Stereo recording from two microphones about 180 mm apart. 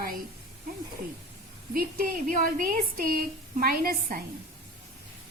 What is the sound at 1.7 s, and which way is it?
A woman's voice, 50° right (ahead or behind).